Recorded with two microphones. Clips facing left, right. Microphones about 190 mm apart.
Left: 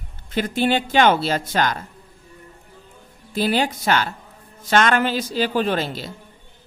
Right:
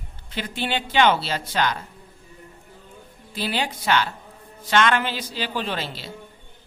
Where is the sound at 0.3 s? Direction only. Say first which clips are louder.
Left 7 dB; 45° left (ahead or behind).